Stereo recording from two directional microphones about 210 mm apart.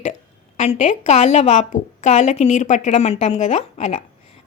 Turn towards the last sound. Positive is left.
turn(degrees=30)  # may be behind; listen again after turning